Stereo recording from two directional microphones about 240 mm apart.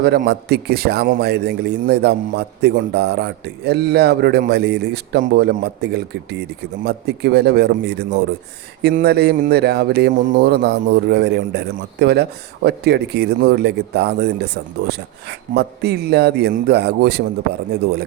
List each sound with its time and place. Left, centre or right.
0.0 s speech: right